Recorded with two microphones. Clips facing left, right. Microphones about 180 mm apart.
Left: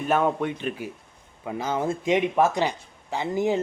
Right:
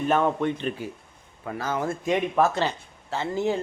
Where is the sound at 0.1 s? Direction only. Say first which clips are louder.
Left 1 dB; 10° left (ahead or behind).